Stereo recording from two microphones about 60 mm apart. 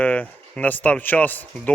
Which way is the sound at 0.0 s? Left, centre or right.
Left.